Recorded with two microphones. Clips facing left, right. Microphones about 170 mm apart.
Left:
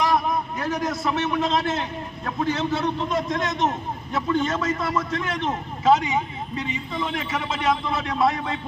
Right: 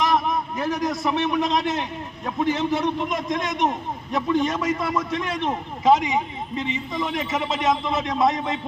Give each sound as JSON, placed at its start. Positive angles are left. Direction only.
{"t": 0.6, "sound": "a man's voice", "side_deg": -15}